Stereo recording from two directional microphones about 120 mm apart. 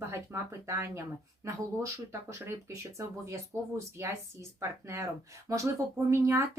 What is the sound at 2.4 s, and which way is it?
Speech, 25° right (ahead or behind).